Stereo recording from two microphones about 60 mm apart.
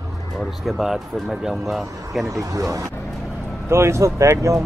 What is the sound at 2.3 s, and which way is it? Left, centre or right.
Speech, right.